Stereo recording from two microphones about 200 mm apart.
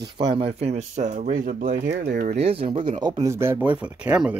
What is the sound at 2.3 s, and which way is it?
Speech, 30° right (ahead or behind).